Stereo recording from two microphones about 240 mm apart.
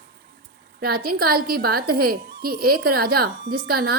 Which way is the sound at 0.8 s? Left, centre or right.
Right.